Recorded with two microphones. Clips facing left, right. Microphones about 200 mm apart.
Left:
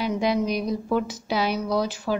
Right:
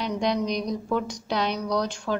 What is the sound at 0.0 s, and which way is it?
A woman's voice, 5° left (ahead or behind).